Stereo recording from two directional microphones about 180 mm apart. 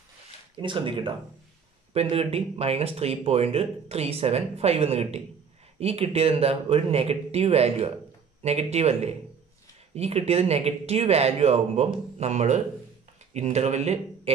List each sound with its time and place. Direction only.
0.6 s speech: 30° right (ahead or behind)